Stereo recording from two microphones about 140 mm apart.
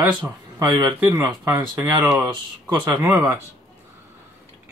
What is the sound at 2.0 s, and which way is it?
Speech, 10° right (ahead or behind).